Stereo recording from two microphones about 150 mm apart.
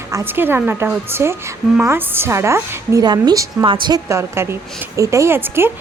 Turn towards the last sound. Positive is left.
turn(degrees=-15)  # may be behind; listen again after turning